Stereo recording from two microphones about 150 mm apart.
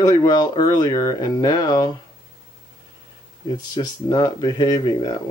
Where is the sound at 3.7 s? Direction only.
25° left (ahead or behind).